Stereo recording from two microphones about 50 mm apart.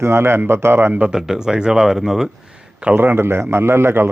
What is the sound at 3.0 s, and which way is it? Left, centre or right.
A man's voice, right.